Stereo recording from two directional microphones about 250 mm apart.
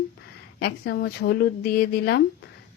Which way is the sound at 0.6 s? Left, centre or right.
Left.